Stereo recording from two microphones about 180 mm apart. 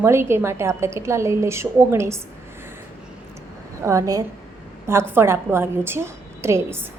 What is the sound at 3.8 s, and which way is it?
A woman's voice, 15° right (ahead or behind).